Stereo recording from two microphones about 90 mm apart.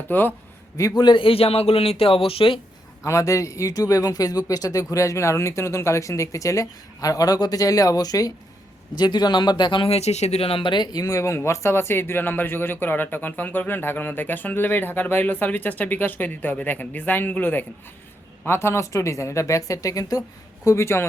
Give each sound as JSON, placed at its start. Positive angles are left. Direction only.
{"t": 0.1, "sound": "speech", "side_deg": 20}
{"t": 0.8, "sound": "speech", "side_deg": 40}
{"t": 1.0, "sound": "speech", "side_deg": 70}
{"t": 3.0, "sound": "speech", "side_deg": 35}
{"t": 10.4, "sound": "speech", "side_deg": 80}
{"t": 11.0, "sound": "speech", "side_deg": 35}